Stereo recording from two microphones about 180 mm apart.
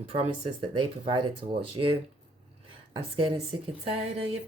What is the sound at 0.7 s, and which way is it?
Speech, 25° right (ahead or behind).